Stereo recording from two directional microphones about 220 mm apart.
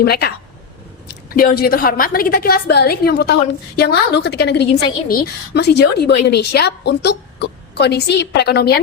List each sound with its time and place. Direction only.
0.0 s a woman's voice: 45° left (ahead or behind)